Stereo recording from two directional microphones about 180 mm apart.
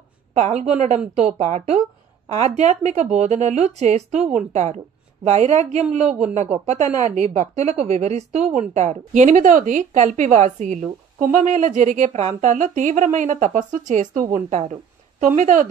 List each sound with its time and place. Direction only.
0.3 s a woman's voice: 40° right (ahead or behind)